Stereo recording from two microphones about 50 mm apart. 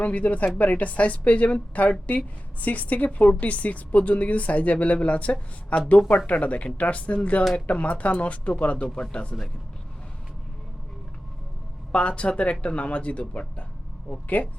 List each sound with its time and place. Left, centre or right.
0.0 s a woman's voice: left
11.9 s a woman's voice: left